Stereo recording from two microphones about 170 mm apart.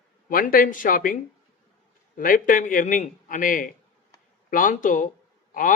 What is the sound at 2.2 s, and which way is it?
A man's voice, 55° left (ahead or behind).